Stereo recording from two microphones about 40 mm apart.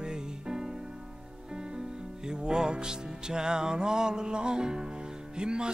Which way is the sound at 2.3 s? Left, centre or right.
Centre.